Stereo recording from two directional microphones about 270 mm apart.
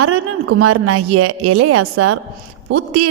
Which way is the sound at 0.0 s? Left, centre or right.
Right.